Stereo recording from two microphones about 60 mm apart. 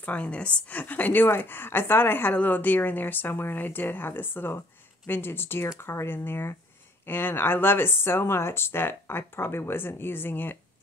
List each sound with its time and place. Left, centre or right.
0.0 s a woman's voice: left